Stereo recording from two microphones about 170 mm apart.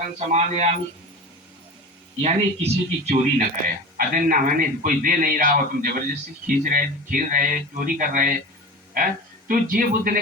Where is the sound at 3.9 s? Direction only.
55° right (ahead or behind).